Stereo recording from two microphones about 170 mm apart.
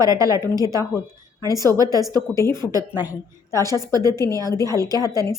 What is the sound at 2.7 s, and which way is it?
A woman's voice, 10° right (ahead or behind).